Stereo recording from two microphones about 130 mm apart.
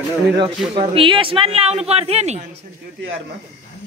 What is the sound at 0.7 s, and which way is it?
Speech, 45° right (ahead or behind).